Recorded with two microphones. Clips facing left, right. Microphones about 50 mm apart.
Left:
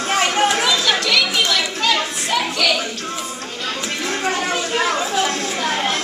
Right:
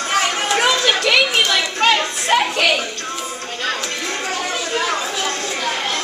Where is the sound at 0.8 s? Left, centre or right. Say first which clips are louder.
Right 2 dB; right.